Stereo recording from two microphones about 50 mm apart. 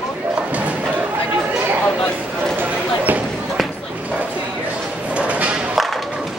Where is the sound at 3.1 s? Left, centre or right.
Right.